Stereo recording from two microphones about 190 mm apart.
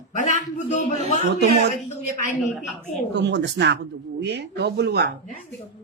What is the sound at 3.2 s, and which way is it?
Speech, 65° right (ahead or behind).